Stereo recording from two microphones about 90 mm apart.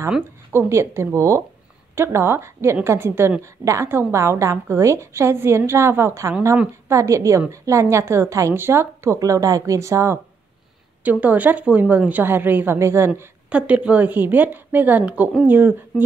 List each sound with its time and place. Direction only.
0.5 s a woman's voice: 25° right (ahead or behind)
11.1 s a woman's voice: 20° right (ahead or behind)
13.5 s a woman's voice: 15° right (ahead or behind)